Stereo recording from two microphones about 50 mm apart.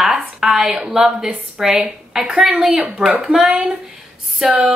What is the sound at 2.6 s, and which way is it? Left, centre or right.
Speech, right.